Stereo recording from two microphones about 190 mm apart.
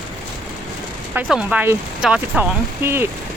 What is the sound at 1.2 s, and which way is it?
Speech, 5° right (ahead or behind).